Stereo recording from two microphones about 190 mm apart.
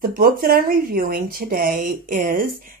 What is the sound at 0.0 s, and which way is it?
Speech, 50° right (ahead or behind).